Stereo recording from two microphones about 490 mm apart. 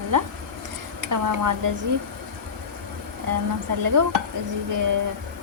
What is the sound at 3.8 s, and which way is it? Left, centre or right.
Speech, right.